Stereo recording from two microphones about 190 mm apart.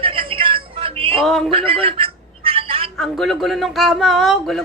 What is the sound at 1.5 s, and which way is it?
Speech, 30° right (ahead or behind).